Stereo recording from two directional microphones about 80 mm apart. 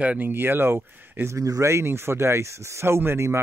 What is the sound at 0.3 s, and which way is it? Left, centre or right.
Speech, right.